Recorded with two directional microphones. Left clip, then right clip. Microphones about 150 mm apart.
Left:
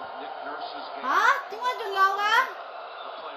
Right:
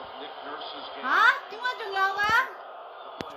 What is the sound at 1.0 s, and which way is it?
A woman's voice, 10° right (ahead or behind).